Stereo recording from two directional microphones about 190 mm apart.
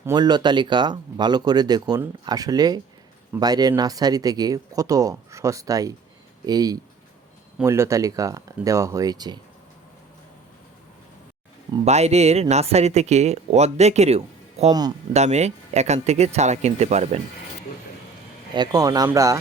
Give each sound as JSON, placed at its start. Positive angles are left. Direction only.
{"t": 0.0, "sound": "speech", "side_deg": -20}
{"t": 11.9, "sound": "speech", "side_deg": -35}
{"t": 14.7, "sound": "speech", "side_deg": -20}
{"t": 15.1, "sound": "speech", "side_deg": -35}
{"t": 18.5, "sound": "speech", "side_deg": -20}